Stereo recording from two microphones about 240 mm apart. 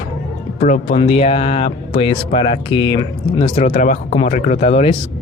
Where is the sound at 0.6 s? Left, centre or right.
Left.